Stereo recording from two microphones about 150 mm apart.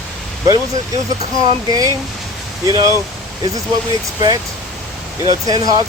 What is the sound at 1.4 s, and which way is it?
Speech, 25° right (ahead or behind).